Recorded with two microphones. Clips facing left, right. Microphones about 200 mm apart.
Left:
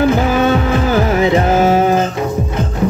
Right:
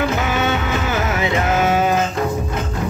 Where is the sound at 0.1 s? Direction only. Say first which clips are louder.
Left 7 dB; 30° left (ahead or behind).